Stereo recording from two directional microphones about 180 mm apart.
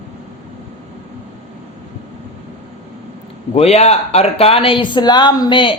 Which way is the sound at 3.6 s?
35° left (ahead or behind).